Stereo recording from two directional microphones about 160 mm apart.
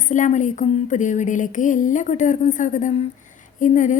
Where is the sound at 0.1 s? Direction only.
50° left (ahead or behind).